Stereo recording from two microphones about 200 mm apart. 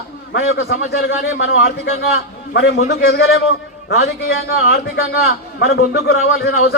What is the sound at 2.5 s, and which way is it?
A man's voice, 60° left (ahead or behind).